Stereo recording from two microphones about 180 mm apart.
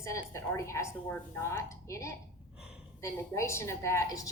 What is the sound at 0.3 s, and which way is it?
A woman's voice, 15° left (ahead or behind).